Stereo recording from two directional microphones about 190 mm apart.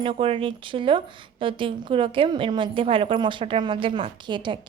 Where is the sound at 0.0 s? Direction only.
30° right (ahead or behind).